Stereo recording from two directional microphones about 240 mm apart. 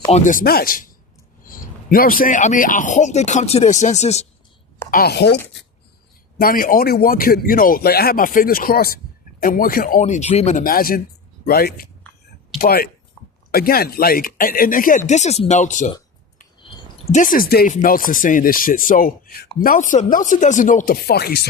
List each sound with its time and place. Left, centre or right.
0.1 s speech: left
4.9 s speech: left
6.4 s speech: left
16.6 s clicking: left
17.2 s speech: left